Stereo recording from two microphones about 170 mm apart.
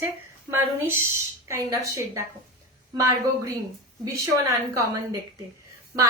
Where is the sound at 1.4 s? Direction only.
15° right (ahead or behind).